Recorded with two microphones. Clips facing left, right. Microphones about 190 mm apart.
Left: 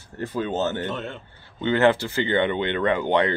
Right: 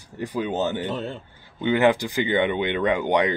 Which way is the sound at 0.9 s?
35° right (ahead or behind).